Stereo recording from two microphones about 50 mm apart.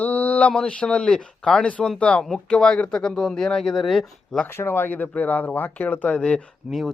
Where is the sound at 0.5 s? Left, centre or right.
Centre.